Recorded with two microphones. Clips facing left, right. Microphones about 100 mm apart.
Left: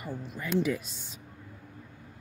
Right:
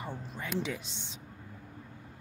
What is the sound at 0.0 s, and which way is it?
Speech, 30° right (ahead or behind).